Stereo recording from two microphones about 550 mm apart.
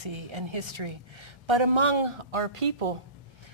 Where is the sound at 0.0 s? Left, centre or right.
Right.